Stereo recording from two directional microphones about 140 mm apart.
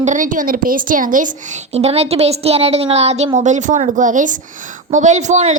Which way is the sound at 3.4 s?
60° right (ahead or behind).